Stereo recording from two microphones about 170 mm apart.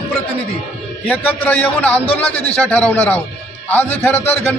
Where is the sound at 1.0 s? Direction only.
10° left (ahead or behind).